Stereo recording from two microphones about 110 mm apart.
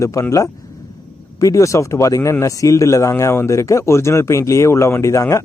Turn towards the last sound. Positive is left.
turn(degrees=25)  # may be behind; listen again after turning